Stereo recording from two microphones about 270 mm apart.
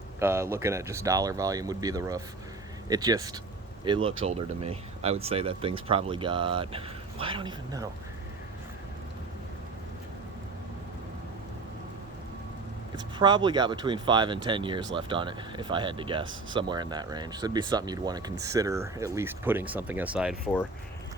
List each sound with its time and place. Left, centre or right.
0.2 s speech: centre
13.0 s speech: centre